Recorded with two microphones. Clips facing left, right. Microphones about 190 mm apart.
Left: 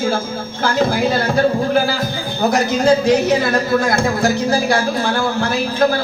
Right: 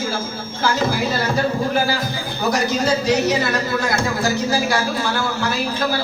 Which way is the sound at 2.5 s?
55° left (ahead or behind).